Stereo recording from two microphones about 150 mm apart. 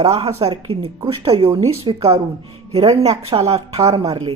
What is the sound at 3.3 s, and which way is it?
Speech, 40° right (ahead or behind).